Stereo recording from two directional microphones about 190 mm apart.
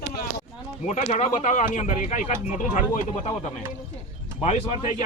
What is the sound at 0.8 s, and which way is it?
Speech, 35° left (ahead or behind).